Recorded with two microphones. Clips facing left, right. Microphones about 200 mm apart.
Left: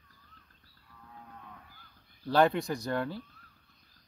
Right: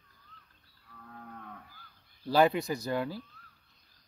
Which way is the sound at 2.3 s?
5° right (ahead or behind).